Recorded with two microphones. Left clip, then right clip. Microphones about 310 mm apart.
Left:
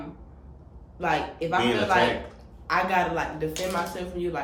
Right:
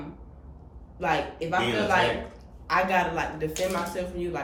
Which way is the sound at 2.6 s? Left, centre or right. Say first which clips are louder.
Even; centre.